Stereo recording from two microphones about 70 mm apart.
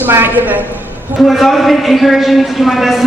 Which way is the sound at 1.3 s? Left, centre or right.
Centre.